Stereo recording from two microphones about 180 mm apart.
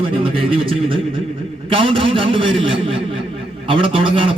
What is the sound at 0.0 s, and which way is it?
A man's voice, 30° right (ahead or behind).